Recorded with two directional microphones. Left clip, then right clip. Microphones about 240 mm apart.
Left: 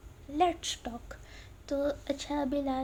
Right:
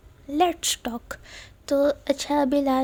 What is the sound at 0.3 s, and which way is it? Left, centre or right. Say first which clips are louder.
Speech: right 6 dB; right.